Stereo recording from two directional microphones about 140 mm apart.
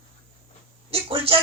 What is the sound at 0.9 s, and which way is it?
Speech, 45° right (ahead or behind).